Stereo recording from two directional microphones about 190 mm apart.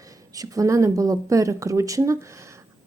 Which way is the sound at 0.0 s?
20° right (ahead or behind).